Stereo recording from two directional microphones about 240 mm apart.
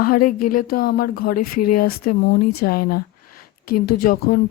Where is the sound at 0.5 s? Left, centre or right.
Left.